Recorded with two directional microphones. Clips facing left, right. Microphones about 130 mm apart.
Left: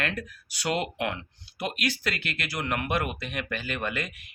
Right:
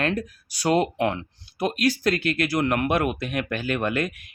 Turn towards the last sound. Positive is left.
turn(degrees=-50)  # may be behind; listen again after turning